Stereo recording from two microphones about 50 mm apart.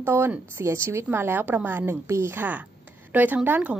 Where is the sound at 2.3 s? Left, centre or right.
Right.